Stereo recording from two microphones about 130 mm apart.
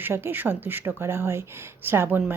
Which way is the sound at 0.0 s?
15° right (ahead or behind).